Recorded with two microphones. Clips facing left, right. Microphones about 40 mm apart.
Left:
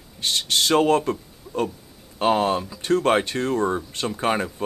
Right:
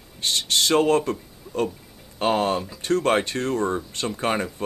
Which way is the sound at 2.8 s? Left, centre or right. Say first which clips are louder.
Left 1 dB; left.